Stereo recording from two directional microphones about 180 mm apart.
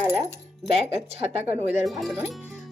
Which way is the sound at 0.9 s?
35° right (ahead or behind).